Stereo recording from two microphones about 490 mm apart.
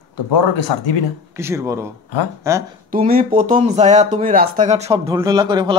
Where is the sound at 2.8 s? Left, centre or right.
Centre.